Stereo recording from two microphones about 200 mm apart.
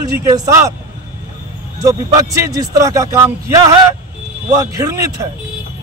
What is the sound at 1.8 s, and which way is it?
A man's voice, 15° right (ahead or behind).